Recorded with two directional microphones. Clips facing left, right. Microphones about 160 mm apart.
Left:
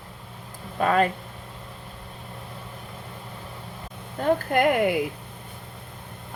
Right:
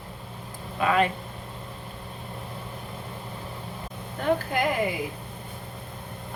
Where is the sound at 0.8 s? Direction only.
45° left (ahead or behind).